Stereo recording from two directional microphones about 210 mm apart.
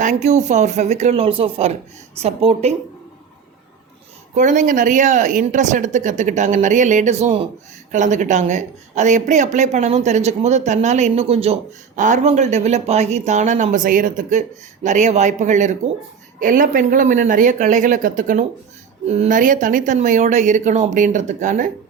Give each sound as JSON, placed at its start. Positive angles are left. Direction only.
{"t": 0.0, "sound": "a woman's voice", "side_deg": -35}
{"t": 4.4, "sound": "speech", "side_deg": -35}